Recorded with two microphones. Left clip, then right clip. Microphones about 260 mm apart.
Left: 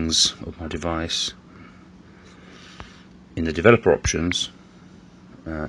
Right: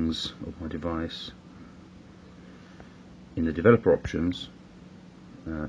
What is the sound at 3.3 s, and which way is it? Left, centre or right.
Speech, centre.